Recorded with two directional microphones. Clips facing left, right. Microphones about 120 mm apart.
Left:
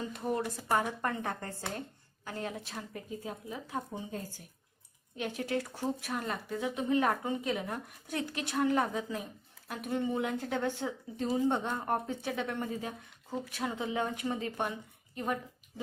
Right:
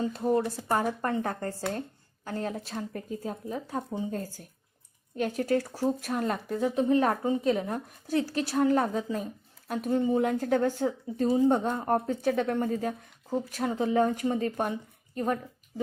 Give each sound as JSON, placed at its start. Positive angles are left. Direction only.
{"t": 0.3, "sound": "speech", "side_deg": -30}